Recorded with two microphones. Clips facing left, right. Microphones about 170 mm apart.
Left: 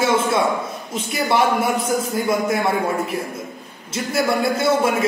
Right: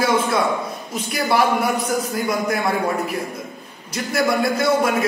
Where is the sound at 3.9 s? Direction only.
25° left (ahead or behind).